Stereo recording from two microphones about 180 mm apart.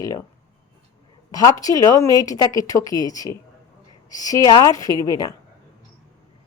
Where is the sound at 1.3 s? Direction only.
20° left (ahead or behind).